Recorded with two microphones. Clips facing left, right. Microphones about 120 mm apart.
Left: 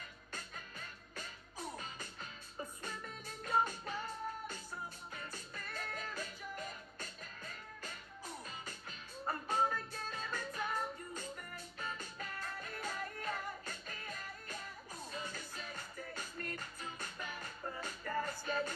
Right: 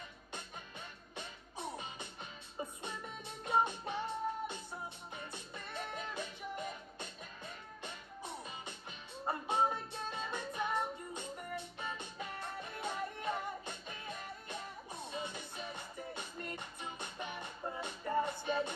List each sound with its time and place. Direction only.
0.3 s music: 25° right (ahead or behind)